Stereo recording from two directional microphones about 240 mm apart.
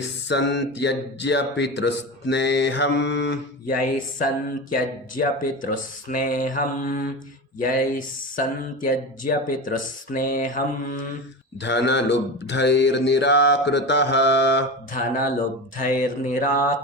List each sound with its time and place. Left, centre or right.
0.3 s mantra: left
3.8 s speech: left
11.6 s mantra: left
15.8 s speech: left